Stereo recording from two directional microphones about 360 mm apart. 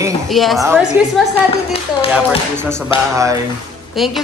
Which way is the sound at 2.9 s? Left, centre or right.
Centre.